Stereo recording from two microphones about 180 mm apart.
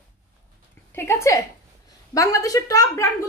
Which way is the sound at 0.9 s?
15° left (ahead or behind).